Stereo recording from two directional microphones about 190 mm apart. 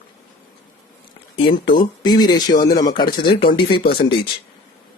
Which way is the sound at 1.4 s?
25° left (ahead or behind).